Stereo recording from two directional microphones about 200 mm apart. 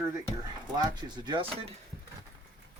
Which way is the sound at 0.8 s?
20° right (ahead or behind).